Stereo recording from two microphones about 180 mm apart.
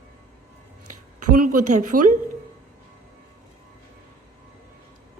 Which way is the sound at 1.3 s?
50° right (ahead or behind).